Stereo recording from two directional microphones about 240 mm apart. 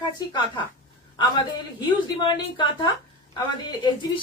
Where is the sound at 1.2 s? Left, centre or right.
Centre.